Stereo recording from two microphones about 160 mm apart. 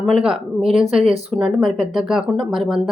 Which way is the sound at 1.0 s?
35° right (ahead or behind).